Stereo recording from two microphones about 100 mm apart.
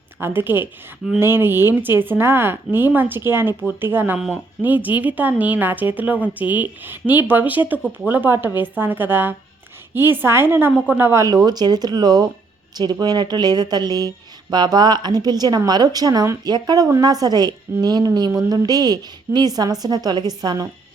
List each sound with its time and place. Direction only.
0.2 s a woman's voice: 20° right (ahead or behind); by 20.7 s 40° right (ahead or behind)